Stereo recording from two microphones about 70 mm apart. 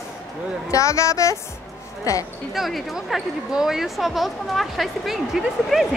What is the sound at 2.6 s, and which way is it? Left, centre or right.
A woman's voice, centre.